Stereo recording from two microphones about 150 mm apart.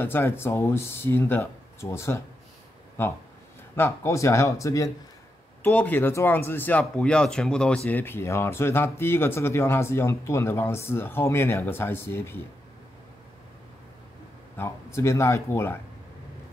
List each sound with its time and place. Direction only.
0.0 s speech: 15° left (ahead or behind)
5.6 s speech: 10° left (ahead or behind)
14.6 s speech: 20° left (ahead or behind)